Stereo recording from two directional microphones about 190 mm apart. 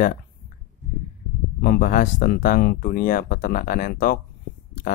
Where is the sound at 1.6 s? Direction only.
50° left (ahead or behind).